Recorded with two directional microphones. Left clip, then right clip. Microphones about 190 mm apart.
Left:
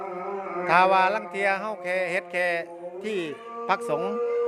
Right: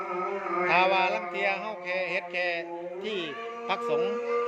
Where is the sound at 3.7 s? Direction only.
30° left (ahead or behind).